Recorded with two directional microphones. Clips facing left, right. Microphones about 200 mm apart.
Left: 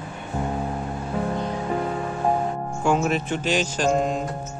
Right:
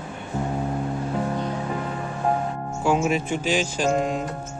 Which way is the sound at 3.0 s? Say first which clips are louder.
Even; 10° right (ahead or behind).